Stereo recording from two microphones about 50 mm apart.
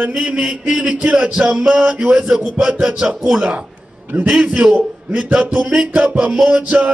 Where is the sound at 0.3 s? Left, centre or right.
Right.